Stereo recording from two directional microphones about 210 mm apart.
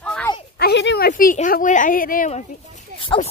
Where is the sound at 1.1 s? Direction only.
40° left (ahead or behind).